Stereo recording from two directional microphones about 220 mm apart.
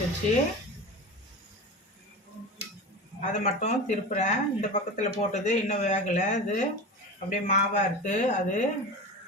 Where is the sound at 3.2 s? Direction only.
35° left (ahead or behind).